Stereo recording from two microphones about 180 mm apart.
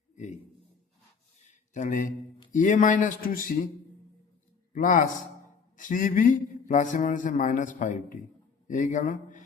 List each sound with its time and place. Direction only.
1.5 s a sound: 45° left (ahead or behind)
2.5 s speech: 45° left (ahead or behind)
4.7 s a man's voice: 45° left (ahead or behind)